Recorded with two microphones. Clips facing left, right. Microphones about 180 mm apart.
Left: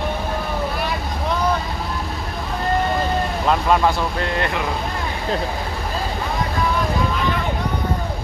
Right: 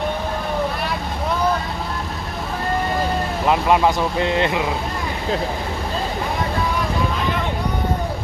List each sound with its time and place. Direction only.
3.4 s speech: 10° right (ahead or behind)